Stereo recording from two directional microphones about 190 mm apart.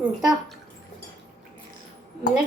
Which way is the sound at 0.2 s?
Centre (ahead or behind).